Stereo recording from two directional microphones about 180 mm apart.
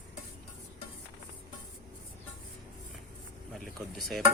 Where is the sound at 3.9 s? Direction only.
Centre (ahead or behind).